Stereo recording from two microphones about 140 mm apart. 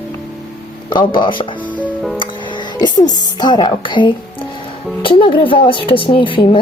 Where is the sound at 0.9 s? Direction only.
35° left (ahead or behind).